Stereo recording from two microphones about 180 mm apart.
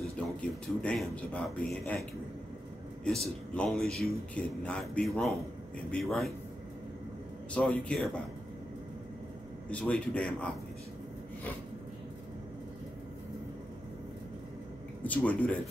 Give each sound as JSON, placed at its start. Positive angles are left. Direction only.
{"t": 0.0, "sound": "speech", "side_deg": 5}
{"t": 3.5, "sound": "a man's voice", "side_deg": 5}
{"t": 7.5, "sound": "a man's voice", "side_deg": 5}
{"t": 9.7, "sound": "a man's voice", "side_deg": 5}
{"t": 15.0, "sound": "a man's voice", "side_deg": 10}